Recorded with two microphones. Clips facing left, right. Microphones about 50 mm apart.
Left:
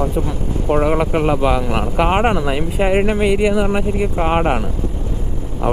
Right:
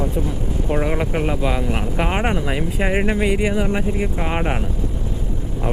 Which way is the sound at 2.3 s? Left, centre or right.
Left.